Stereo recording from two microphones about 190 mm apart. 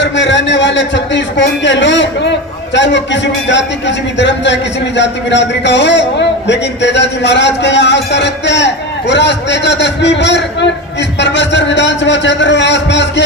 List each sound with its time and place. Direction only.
0.0 s a man's voice: 70° left (ahead or behind)